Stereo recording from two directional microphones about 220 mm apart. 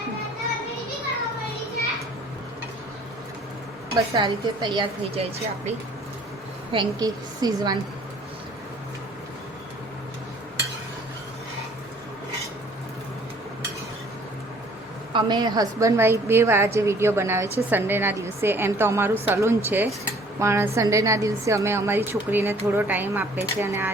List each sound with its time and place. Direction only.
3.9 s a woman's voice: 20° right (ahead or behind)
6.7 s a woman's voice: 20° right (ahead or behind)
15.1 s a woman's voice: 20° right (ahead or behind)